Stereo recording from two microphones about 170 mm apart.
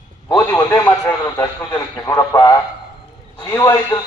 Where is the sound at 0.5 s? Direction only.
15° left (ahead or behind).